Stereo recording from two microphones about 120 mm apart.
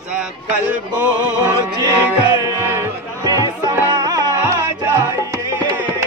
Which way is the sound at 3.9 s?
35° right (ahead or behind).